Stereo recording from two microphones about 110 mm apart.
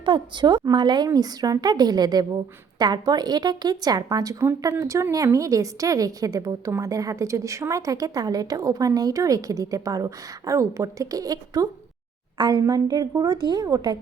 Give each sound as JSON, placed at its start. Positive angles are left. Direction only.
{"t": 0.0, "sound": "a woman's voice", "side_deg": -45}